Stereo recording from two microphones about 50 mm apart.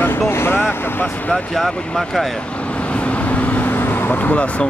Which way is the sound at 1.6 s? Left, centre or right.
Centre.